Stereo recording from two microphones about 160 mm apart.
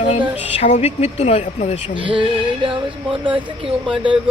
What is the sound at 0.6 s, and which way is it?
Speech, 45° left (ahead or behind).